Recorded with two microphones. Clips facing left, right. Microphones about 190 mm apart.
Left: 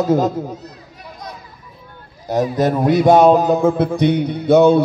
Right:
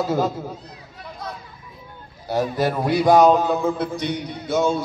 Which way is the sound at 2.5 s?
20° left (ahead or behind).